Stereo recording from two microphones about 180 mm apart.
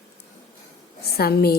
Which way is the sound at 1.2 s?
60° left (ahead or behind).